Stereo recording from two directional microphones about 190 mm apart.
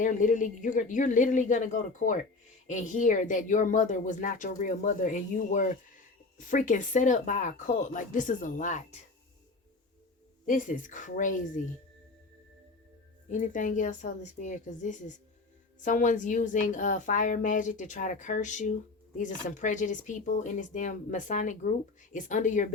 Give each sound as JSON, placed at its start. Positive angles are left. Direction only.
{"t": 0.0, "sound": "speech", "side_deg": 45}
{"t": 10.4, "sound": "speech", "side_deg": 45}
{"t": 13.2, "sound": "a woman's voice", "side_deg": 45}